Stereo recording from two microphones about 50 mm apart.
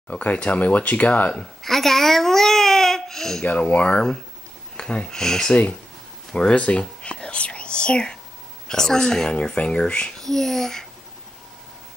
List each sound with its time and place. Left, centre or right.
0.1 s speech: left
1.6 s a child's voice: centre
3.4 s speech: left
5.5 s speech: left
10.1 s speech: centre